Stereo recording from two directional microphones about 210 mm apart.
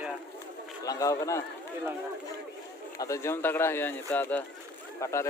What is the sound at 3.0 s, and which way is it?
Speech, 15° left (ahead or behind).